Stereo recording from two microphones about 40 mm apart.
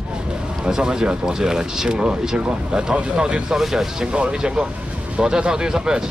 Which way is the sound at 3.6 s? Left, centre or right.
Centre.